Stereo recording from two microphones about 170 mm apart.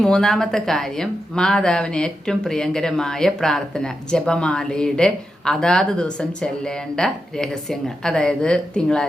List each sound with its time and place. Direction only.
0.0 s speech: 5° left (ahead or behind)